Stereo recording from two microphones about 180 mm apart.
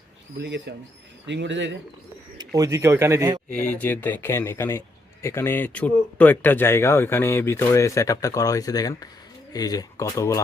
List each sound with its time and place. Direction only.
0.4 s speech: 75° right (ahead or behind)
2.6 s speech: 15° right (ahead or behind)
3.5 s speech: 10° left (ahead or behind)